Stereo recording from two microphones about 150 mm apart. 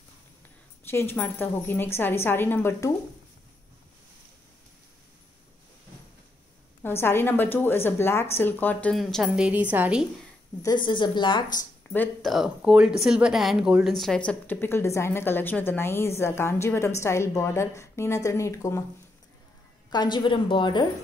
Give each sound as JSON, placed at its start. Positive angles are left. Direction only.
{"t": 0.8, "sound": "speech", "side_deg": 15}
{"t": 6.8, "sound": "speech", "side_deg": 15}
{"t": 8.9, "sound": "a woman's voice", "side_deg": 0}
{"t": 10.6, "sound": "a woman's voice", "side_deg": 30}
{"t": 12.2, "sound": "speech", "side_deg": 0}
{"t": 19.9, "sound": "a woman's voice", "side_deg": 30}